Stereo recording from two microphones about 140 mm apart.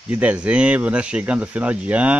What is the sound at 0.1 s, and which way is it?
Speech, 10° right (ahead or behind).